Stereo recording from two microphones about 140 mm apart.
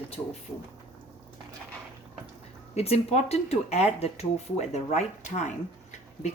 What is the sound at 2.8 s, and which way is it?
Speech, 50° left (ahead or behind).